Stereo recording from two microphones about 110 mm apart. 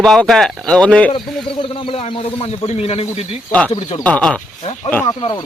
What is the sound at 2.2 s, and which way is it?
A man's voice, 70° left (ahead or behind).